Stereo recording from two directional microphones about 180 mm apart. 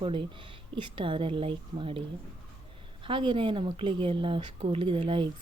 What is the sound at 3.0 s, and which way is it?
Speech, 30° right (ahead or behind).